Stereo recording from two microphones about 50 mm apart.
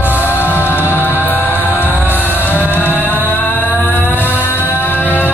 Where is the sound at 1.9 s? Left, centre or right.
Right.